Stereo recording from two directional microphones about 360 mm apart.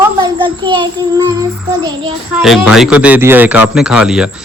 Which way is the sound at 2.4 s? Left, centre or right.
Centre.